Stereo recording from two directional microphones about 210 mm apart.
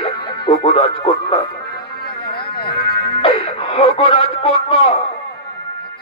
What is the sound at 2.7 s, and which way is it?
Music, 25° left (ahead or behind).